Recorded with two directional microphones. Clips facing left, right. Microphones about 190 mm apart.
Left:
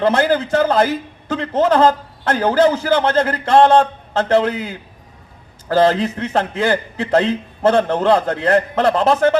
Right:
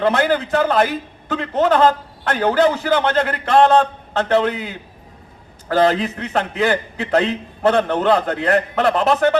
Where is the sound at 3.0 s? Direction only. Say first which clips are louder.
Left 2 dB; 25° left (ahead or behind).